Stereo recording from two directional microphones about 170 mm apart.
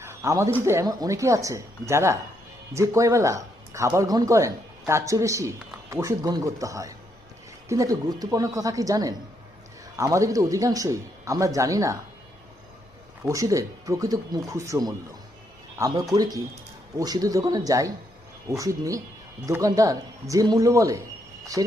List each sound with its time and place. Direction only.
0.0 s a sound: 15° right (ahead or behind)
0.6 s a man's voice: 15° right (ahead or behind)
13.2 s a man's voice: 20° right (ahead or behind)
16.1 s a man's voice: 20° right (ahead or behind)